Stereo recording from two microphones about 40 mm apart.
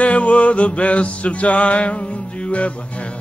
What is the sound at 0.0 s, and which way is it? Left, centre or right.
Music, left.